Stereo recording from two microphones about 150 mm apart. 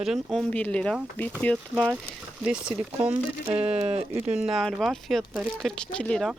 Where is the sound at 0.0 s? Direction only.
Centre (ahead or behind).